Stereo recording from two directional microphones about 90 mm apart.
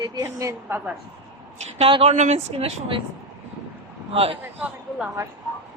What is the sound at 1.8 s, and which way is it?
Speech, 90° right.